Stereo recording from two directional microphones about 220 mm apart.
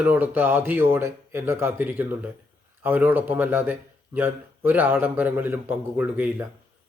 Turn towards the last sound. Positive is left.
turn(degrees=-10)  # may be behind; listen again after turning